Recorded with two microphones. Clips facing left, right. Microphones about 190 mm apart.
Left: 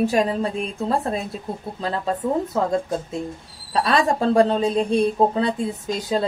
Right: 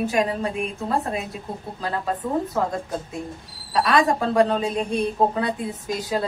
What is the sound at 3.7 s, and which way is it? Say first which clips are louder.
A woman's voice: even; 30° left (ahead or behind).